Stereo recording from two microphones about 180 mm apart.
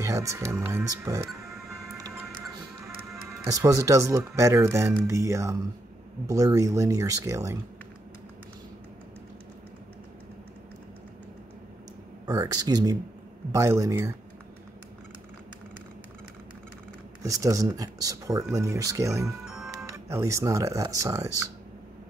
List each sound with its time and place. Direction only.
0.0 s speech: 20° right (ahead or behind)
3.5 s speech: 15° right (ahead or behind)
12.3 s speech: 20° right (ahead or behind)
17.2 s speech: 20° right (ahead or behind)
19.4 s music: centre (ahead or behind)
19.9 s speech: 15° right (ahead or behind)